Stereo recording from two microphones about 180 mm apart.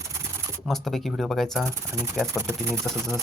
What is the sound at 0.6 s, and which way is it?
Speech, centre (ahead or behind).